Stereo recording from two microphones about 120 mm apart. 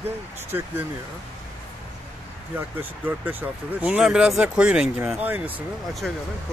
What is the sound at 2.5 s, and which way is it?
Speech, 15° right (ahead or behind).